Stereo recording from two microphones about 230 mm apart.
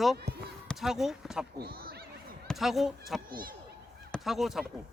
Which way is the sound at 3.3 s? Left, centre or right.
Right.